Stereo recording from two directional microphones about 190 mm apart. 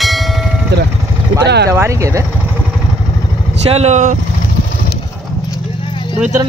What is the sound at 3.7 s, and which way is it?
Speech, 35° right (ahead or behind).